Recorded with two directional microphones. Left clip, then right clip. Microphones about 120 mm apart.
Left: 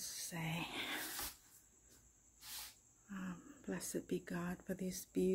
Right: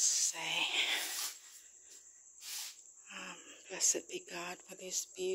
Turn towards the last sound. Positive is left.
turn(degrees=20)  # may be behind; listen again after turning